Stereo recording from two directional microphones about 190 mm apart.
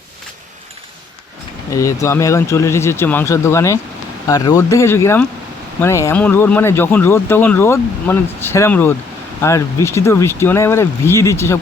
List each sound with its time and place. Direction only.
1.7 s speech: 15° left (ahead or behind)